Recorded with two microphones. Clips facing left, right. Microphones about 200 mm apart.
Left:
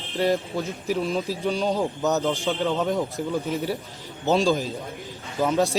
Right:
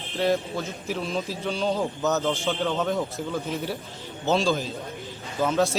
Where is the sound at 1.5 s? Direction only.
15° left (ahead or behind).